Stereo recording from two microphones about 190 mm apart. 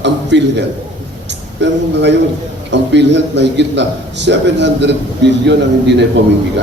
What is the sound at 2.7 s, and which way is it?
A man's voice, 65° right (ahead or behind).